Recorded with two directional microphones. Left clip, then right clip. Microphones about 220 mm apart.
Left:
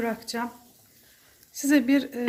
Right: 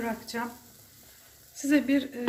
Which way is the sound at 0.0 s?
50° left (ahead or behind).